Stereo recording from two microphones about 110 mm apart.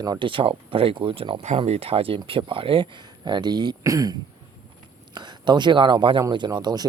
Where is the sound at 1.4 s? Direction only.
75° right (ahead or behind); by 4.1 s 35° right (ahead or behind).